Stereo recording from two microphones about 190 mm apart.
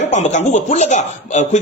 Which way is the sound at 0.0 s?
40° left (ahead or behind).